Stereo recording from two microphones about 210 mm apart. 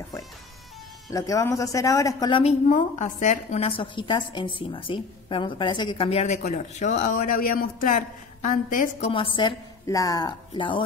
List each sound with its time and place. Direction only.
1.1 s a woman's voice: 15° left (ahead or behind)
2.7 s a woman's voice: 35° left (ahead or behind)
9.1 s a woman's voice: 25° left (ahead or behind)